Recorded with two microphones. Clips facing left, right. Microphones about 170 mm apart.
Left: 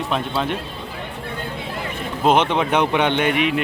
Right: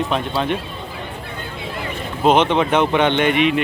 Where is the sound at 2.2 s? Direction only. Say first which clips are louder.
Right 2 dB; 10° left (ahead or behind).